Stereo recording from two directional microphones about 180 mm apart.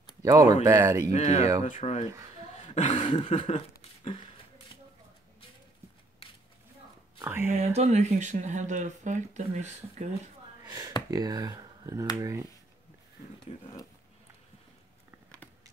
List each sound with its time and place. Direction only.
0.2 s speech: 20° right (ahead or behind)
1.1 s speech: 35° left (ahead or behind)
2.5 s a sound: 40° left (ahead or behind)
3.3 s speech: 35° left (ahead or behind)
7.2 s speech: 10° right (ahead or behind)
7.5 s speech: 35° right (ahead or behind)
11.1 s speech: 20° right (ahead or behind)
13.5 s speech: 35° left (ahead or behind)